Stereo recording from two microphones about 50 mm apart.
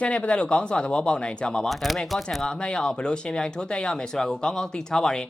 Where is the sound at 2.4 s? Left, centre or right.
Centre.